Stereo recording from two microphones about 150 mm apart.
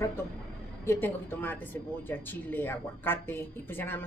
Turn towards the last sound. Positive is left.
turn(degrees=15)  # may be behind; listen again after turning